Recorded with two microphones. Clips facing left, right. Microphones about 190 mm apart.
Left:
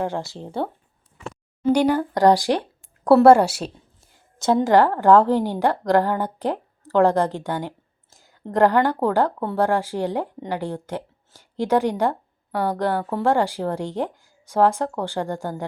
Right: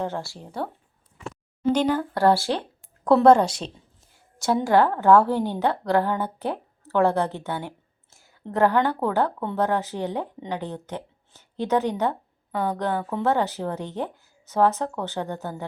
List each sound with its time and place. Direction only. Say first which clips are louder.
0.0 s speech: left 3 dB; 15° left (ahead or behind)
1.7 s a woman's voice: left 4 dB; 10° left (ahead or behind)